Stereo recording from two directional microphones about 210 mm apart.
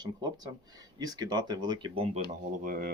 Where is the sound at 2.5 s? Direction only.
40° right (ahead or behind).